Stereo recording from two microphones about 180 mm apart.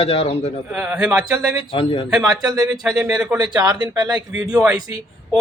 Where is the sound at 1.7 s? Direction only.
35° left (ahead or behind).